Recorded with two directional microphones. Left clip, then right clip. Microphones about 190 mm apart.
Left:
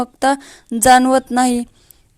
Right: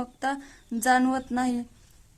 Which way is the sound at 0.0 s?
40° left (ahead or behind).